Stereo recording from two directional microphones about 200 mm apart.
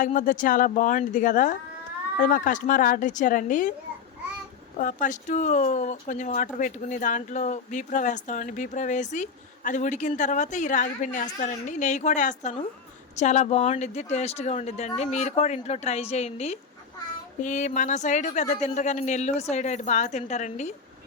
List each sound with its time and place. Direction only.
0.0 s speech: 40° left (ahead or behind)
4.8 s speech: 40° left (ahead or behind)